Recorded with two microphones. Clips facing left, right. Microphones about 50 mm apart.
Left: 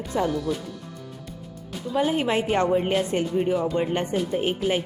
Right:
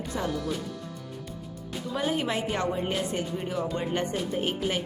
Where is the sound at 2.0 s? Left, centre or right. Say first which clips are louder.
Left 6 dB; left.